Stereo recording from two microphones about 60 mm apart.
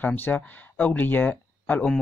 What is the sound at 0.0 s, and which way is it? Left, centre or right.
Speech, left.